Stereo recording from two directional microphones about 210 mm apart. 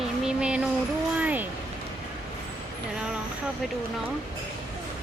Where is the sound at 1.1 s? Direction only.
10° right (ahead or behind).